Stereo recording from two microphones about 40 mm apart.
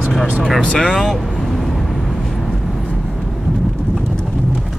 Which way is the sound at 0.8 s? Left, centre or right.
Centre.